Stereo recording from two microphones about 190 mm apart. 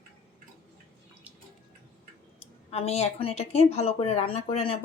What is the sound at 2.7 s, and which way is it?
Speech, 35° left (ahead or behind).